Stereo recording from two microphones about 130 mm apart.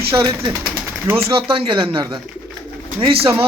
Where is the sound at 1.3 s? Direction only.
45° right (ahead or behind).